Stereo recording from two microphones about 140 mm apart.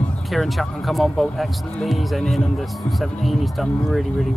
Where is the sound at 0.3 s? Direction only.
Centre (ahead or behind).